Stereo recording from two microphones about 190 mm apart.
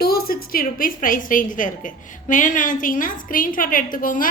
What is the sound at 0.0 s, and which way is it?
A woman's voice, 55° left (ahead or behind).